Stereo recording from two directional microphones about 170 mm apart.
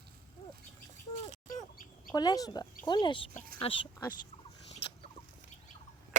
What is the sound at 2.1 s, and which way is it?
Speech, 20° left (ahead or behind).